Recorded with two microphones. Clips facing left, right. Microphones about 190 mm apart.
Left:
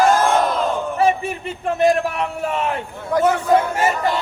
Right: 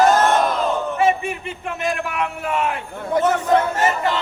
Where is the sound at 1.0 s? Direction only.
35° left (ahead or behind).